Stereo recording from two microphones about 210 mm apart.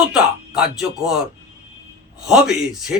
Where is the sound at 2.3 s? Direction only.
Centre (ahead or behind).